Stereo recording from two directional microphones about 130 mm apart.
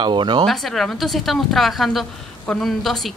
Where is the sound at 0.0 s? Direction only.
35° right (ahead or behind).